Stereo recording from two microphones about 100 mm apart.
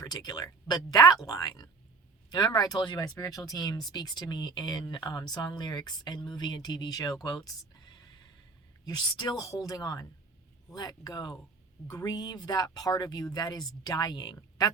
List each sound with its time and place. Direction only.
0.0 s speech: 40° left (ahead or behind)